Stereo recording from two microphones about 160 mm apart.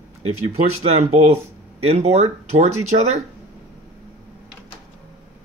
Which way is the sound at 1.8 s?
40° right (ahead or behind).